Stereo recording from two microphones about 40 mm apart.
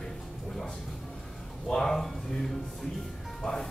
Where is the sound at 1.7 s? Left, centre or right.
Centre.